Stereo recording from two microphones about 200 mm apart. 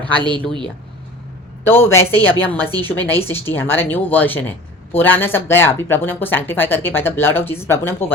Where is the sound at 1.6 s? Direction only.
10° left (ahead or behind).